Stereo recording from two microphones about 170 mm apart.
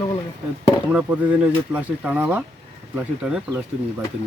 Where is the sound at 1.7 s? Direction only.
5° right (ahead or behind).